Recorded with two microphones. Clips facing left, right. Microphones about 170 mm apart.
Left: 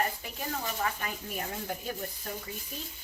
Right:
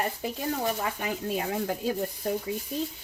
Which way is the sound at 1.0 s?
90° right.